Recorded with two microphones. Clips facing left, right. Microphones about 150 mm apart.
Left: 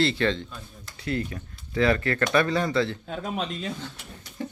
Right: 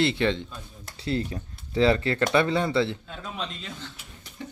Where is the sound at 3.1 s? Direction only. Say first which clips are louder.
Left 5 dB; 45° left (ahead or behind).